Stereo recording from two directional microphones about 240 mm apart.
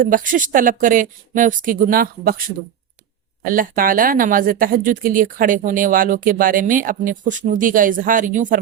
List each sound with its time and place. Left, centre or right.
0.0 s speech: right
3.4 s speech: right